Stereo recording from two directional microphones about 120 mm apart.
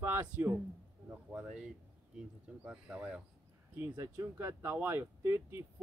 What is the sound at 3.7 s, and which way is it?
Speech, 30° right (ahead or behind).